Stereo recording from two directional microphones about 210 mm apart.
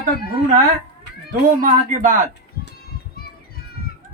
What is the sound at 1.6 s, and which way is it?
Speech, 40° right (ahead or behind).